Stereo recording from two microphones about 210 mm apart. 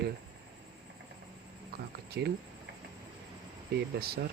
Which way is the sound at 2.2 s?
55° right (ahead or behind).